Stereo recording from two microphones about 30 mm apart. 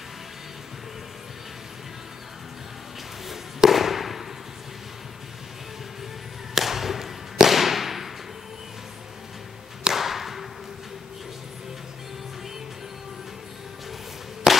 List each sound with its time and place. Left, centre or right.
3.3 s fireworks: centre
6.5 s a sound: centre
9.9 s thump: centre
14.5 s whip: centre